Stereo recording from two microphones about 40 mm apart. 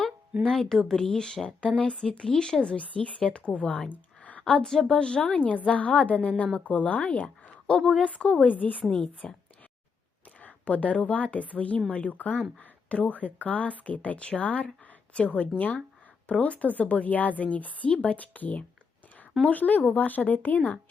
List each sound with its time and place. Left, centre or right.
0.4 s speech: centre
2.7 s a woman's voice: left
3.8 s a sound: left
4.6 s speech: centre
4.9 s a woman's voice: left
5.3 s a woman's voice: left
8.5 s a woman's voice: left
8.9 s a woman's voice: left
10.4 s a woman's voice: left